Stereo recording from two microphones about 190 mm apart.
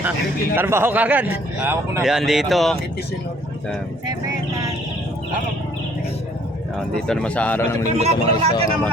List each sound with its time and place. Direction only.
0.5 s a man's voice: 10° right (ahead or behind)
7.1 s a man's voice: 5° left (ahead or behind)
7.9 s speech: 35° right (ahead or behind)